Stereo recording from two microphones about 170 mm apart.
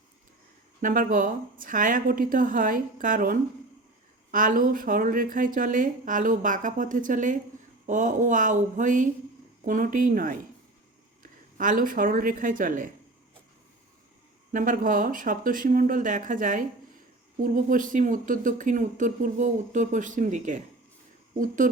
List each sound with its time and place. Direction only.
0.8 s speech: 50° right (ahead or behind)
14.5 s speech: 50° right (ahead or behind)